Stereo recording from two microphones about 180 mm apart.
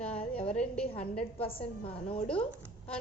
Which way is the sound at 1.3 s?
30° left (ahead or behind).